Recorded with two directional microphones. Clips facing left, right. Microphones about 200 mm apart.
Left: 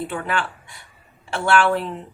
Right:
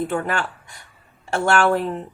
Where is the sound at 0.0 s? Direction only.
45° right (ahead or behind).